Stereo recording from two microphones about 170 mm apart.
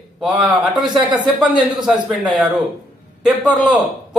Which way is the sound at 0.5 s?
25° right (ahead or behind).